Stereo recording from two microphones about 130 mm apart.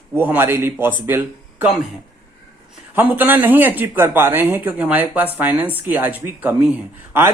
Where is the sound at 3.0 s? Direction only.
15° right (ahead or behind).